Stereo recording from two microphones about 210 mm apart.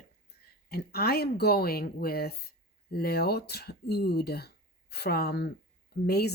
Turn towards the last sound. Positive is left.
turn(degrees=50)  # may be behind; listen again after turning